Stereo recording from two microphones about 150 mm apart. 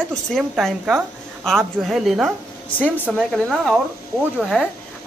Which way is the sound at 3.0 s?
5° right (ahead or behind).